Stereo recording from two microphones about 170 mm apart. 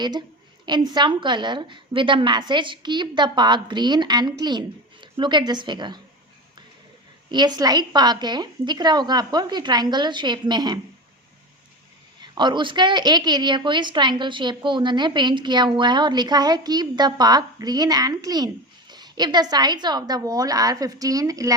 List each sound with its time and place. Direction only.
0.0 s a woman's voice: 25° right (ahead or behind)
7.3 s a woman's voice: 25° right (ahead or behind)
12.2 s a woman's voice: 25° right (ahead or behind)